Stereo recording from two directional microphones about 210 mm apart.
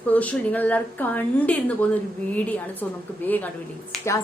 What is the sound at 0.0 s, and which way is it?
A woman's voice, 5° left (ahead or behind).